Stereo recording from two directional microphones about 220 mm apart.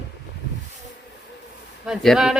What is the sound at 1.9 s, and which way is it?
Speech, centre (ahead or behind).